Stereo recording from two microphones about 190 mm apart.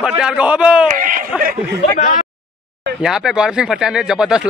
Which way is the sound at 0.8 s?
45° right (ahead or behind).